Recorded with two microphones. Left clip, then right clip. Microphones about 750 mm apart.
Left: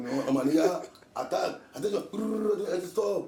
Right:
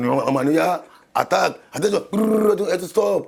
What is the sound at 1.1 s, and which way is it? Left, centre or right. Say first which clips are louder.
A man's voice: right 12 dB; right.